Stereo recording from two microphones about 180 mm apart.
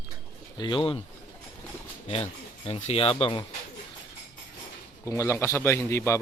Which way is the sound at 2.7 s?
35° left (ahead or behind).